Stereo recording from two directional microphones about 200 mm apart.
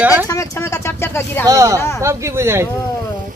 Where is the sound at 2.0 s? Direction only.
15° right (ahead or behind).